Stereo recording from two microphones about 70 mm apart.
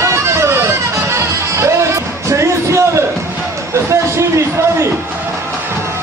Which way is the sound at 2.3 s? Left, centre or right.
Right.